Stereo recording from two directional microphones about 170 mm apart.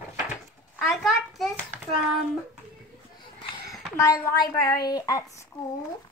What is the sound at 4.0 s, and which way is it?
A woman's voice, 20° left (ahead or behind).